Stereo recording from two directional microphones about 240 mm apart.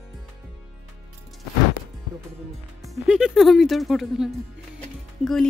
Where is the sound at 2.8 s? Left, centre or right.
Centre.